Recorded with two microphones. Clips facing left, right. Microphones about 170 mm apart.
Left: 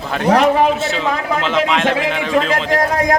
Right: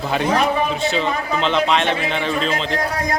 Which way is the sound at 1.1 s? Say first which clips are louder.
Left 3 dB; 75° left (ahead or behind).